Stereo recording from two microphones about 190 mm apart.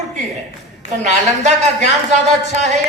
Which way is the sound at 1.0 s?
35° right (ahead or behind).